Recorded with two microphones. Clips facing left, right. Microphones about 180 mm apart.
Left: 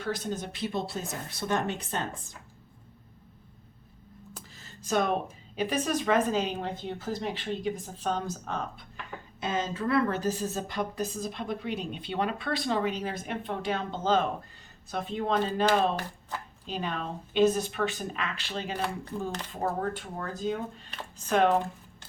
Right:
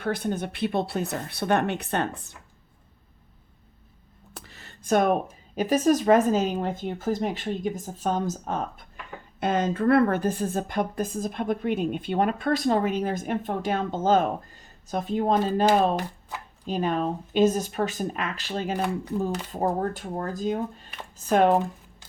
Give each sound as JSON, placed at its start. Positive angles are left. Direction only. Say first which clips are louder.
{"t": 0.0, "sound": "speech", "louder": "right 5 dB", "side_deg": -60}
{"t": 4.4, "sound": "a sound", "louder": "right 2 dB", "side_deg": -65}
{"t": 5.5, "sound": "a woman's voice", "louder": "right 7 dB", "side_deg": -40}
{"t": 9.4, "sound": "a woman's voice", "louder": "right 7 dB", "side_deg": -55}